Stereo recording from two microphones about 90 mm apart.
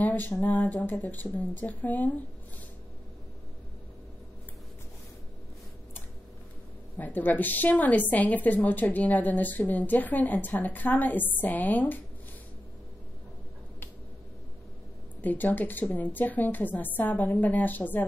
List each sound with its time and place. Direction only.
0.0 s a woman's voice: 20° left (ahead or behind)
7.0 s a woman's voice: 20° left (ahead or behind)
15.2 s a woman's voice: 20° left (ahead or behind)